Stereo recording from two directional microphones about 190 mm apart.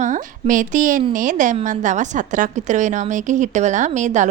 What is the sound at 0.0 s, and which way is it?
A woman's voice, 40° right (ahead or behind).